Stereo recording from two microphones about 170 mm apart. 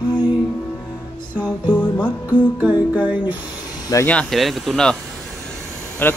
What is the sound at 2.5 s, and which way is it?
Music, 10° right (ahead or behind).